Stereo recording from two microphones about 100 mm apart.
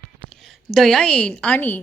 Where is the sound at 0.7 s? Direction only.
5° left (ahead or behind).